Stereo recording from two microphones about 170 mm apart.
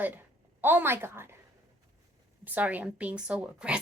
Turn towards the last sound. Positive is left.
turn(degrees=-5)  # may be behind; listen again after turning